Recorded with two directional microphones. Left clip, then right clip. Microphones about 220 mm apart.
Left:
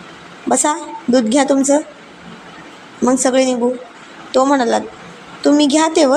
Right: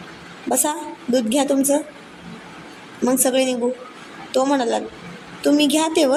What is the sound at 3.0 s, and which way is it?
A woman's voice, 10° left (ahead or behind).